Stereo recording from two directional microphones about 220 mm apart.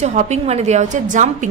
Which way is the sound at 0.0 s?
30° right (ahead or behind).